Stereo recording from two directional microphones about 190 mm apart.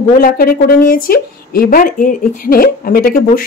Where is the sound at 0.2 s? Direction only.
50° left (ahead or behind).